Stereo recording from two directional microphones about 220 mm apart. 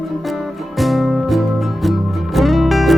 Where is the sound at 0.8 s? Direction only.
Centre (ahead or behind).